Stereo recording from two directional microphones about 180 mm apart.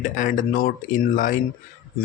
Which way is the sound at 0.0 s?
45° left (ahead or behind).